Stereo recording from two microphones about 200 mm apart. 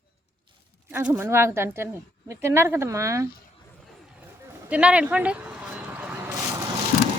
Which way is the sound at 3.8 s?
5° right (ahead or behind).